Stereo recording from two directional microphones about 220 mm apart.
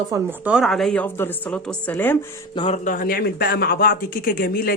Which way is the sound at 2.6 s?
30° left (ahead or behind).